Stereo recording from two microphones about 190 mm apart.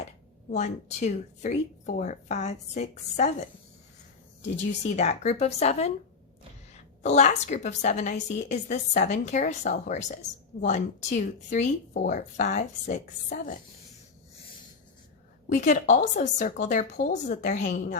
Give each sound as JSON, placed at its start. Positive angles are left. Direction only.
{"t": 0.5, "sound": "a woman's voice", "side_deg": 40}
{"t": 4.5, "sound": "a woman's voice", "side_deg": 35}
{"t": 15.4, "sound": "a woman's voice", "side_deg": 40}